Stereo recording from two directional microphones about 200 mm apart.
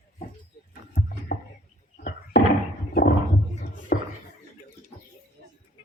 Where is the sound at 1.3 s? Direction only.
55° left (ahead or behind).